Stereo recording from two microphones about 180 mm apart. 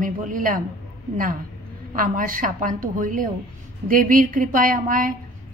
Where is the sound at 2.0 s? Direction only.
50° right (ahead or behind).